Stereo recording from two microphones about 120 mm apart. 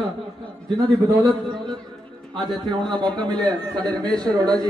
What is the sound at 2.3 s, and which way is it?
Speech, centre (ahead or behind).